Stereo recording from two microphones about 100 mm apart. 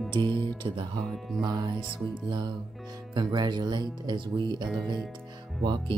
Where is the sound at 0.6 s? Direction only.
55° right (ahead or behind).